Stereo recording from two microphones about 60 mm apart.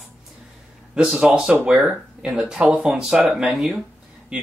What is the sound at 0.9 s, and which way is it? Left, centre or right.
Speech, centre.